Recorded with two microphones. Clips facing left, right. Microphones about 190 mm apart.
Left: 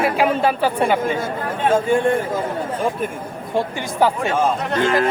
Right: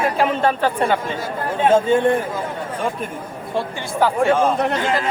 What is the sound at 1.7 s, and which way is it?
Speech, 20° right (ahead or behind).